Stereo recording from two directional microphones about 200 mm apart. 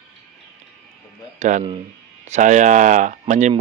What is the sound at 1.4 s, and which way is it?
Speech, 40° right (ahead or behind).